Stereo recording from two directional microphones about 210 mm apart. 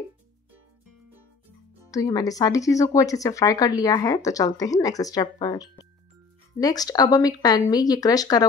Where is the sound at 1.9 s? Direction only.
15° left (ahead or behind).